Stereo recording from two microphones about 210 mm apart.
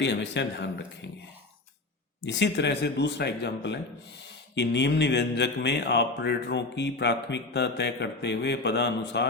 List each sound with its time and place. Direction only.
0.0 s speech: 55° left (ahead or behind)
2.2 s speech: 55° left (ahead or behind)